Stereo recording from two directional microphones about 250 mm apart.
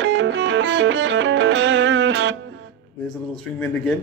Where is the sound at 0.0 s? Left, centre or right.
Right.